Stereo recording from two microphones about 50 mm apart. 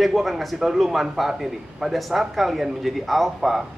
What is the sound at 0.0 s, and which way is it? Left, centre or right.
A man's voice, centre.